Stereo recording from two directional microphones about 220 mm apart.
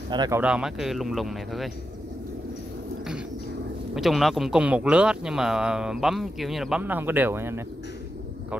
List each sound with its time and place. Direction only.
0.1 s speech: 20° right (ahead or behind)
0.4 s speech: 5° right (ahead or behind)
3.9 s speech: centre (ahead or behind)